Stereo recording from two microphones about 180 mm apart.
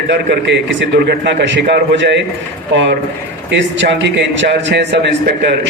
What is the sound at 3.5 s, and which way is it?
A man's voice, 80° right.